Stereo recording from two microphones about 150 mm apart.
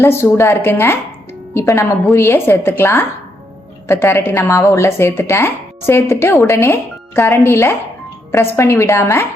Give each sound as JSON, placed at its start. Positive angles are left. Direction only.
{"t": 0.0, "sound": "a woman's voice", "side_deg": 15}